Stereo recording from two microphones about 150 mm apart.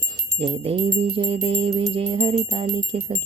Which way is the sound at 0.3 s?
40° right (ahead or behind).